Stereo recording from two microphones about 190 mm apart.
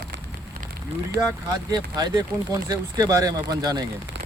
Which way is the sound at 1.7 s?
20° right (ahead or behind).